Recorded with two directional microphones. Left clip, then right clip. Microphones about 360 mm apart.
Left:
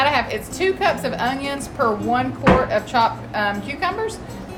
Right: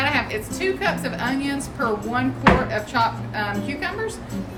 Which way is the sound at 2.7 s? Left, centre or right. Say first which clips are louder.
Left 4 dB; centre.